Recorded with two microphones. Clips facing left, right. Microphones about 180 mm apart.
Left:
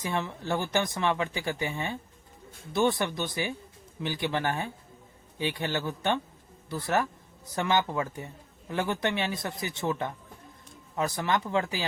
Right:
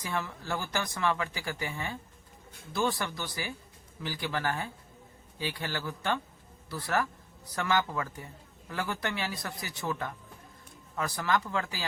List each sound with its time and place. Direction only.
0.0 s speech: 20° left (ahead or behind)